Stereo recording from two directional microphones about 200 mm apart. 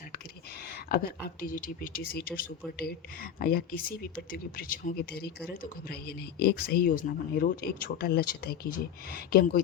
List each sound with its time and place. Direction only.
0.9 s speech: 45° left (ahead or behind)